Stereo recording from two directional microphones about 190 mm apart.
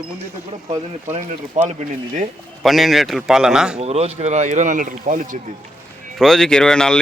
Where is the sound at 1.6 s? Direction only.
40° right (ahead or behind).